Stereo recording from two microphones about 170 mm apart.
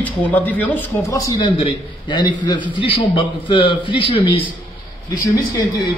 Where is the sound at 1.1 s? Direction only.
20° left (ahead or behind).